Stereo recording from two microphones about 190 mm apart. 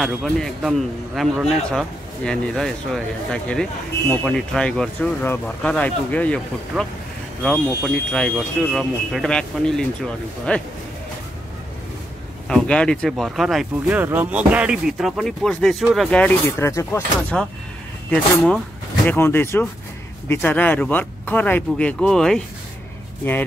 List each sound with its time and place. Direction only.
0.0 s speech: centre (ahead or behind)
6.7 s speech: centre (ahead or behind)
12.4 s speech: 5° left (ahead or behind)